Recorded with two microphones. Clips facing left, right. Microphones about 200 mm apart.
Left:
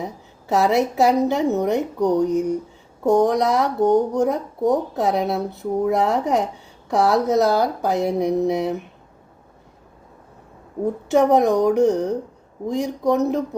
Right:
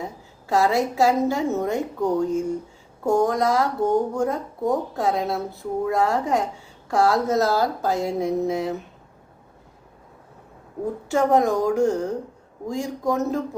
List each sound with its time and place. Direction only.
0.0 s speech: 20° left (ahead or behind)
11.1 s speech: 20° left (ahead or behind)